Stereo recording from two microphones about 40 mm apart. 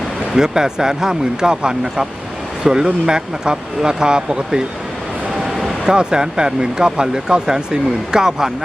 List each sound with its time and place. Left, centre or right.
0.3 s speech: centre
5.8 s speech: centre